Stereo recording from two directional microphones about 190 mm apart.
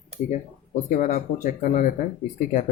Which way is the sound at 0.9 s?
40° left (ahead or behind).